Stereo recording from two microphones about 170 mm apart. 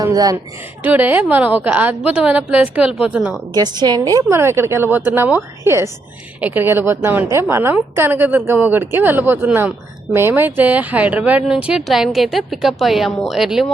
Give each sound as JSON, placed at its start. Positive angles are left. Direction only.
{"t": 0.0, "sound": "speech", "side_deg": -20}
{"t": 0.8, "sound": "a woman's voice", "side_deg": -10}
{"t": 3.5, "sound": "a woman's voice", "side_deg": -25}